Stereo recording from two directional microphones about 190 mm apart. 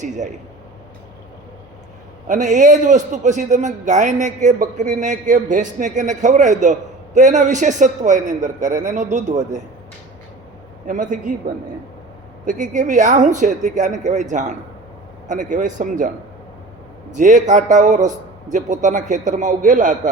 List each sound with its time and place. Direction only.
0.0 s a man's voice: 40° right (ahead or behind)
2.2 s a man's voice: 40° right (ahead or behind)
10.8 s a man's voice: 45° right (ahead or behind)
12.5 s a man's voice: 40° right (ahead or behind)
17.2 s a man's voice: 40° right (ahead or behind)